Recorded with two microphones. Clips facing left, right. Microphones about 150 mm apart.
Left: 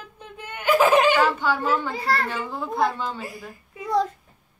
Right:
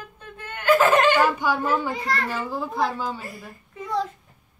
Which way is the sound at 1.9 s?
30° left (ahead or behind).